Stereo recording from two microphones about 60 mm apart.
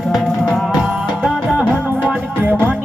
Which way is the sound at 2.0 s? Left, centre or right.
Right.